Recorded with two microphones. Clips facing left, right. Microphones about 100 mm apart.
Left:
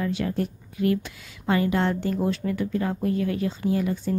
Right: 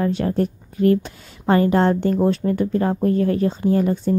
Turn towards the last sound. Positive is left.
turn(degrees=-40)  # may be behind; listen again after turning